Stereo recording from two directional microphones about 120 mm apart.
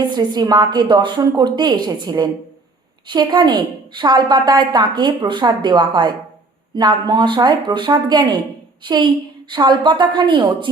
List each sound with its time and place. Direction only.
0.1 s a woman's voice: 35° right (ahead or behind)